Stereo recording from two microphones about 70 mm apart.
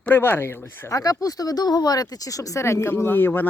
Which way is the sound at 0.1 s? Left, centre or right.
Left.